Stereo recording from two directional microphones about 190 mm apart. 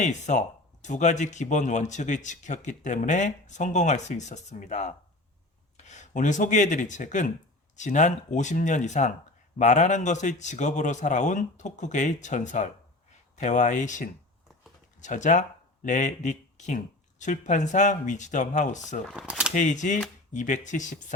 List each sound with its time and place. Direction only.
0.0 s speech: 40° left (ahead or behind)
19.1 s speech: 5° right (ahead or behind)
19.5 s speech: 40° left (ahead or behind)